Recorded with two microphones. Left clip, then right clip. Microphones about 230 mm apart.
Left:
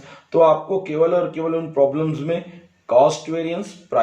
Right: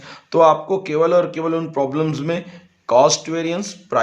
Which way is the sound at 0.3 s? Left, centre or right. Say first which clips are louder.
Right 1 dB; right.